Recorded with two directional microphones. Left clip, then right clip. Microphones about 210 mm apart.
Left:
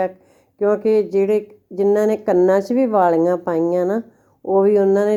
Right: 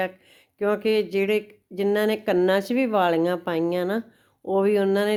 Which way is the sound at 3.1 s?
40° right (ahead or behind).